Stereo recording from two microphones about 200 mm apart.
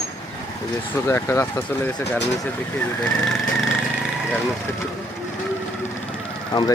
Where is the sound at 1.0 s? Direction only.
15° left (ahead or behind).